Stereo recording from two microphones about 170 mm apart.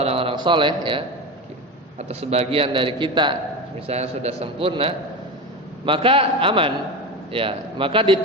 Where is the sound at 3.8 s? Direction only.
40° right (ahead or behind).